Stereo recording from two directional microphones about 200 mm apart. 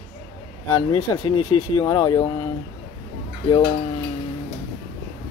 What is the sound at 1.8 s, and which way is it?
Speech, 15° left (ahead or behind).